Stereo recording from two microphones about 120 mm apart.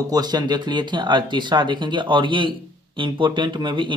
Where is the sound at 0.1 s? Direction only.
35° right (ahead or behind).